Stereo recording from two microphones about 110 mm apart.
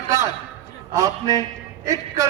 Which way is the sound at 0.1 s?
30° right (ahead or behind).